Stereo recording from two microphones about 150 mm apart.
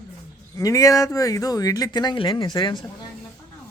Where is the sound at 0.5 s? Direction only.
20° left (ahead or behind).